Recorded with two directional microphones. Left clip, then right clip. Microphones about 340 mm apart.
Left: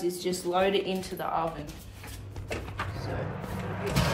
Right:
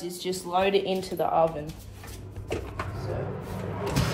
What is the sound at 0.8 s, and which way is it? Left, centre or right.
Speech, right.